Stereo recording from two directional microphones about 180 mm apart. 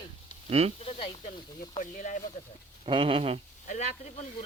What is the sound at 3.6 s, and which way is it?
Speech, 45° left (ahead or behind).